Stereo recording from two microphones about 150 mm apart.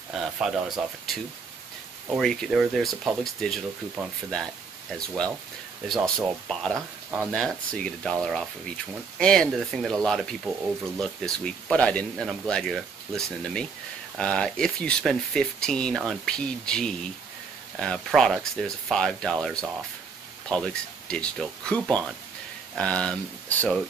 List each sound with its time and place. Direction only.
0.1 s speech: centre (ahead or behind)
4.9 s speech: 5° left (ahead or behind)